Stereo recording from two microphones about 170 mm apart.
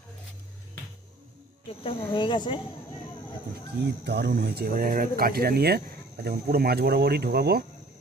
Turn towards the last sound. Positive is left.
turn(degrees=-70)  # may be behind; listen again after turning